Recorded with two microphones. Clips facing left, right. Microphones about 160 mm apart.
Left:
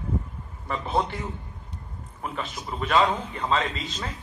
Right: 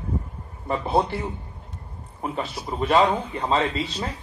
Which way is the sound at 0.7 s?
35° right (ahead or behind).